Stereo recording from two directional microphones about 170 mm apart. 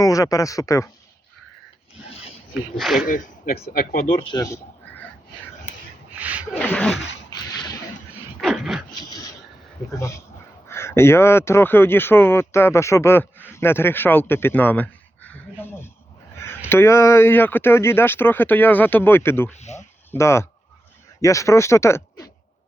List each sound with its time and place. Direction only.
0.0 s speech: 20° left (ahead or behind)
2.0 s filing: 35° left (ahead or behind)
2.7 s speech: centre (ahead or behind)
3.1 s speech: 60° left (ahead or behind)
4.2 s speech: 25° left (ahead or behind)
6.1 s a sound: 10° right (ahead or behind)
6.6 s speech: 10° left (ahead or behind)
6.9 s a sound: 90° left
7.3 s a sound: 25° left (ahead or behind)
8.4 s dog: centre (ahead or behind)
9.0 s a sound: 20° left (ahead or behind)
10.0 s speech: 15° left (ahead or behind)
19.5 s snake: 40° left (ahead or behind)
20.1 s speech: 15° left (ahead or behind)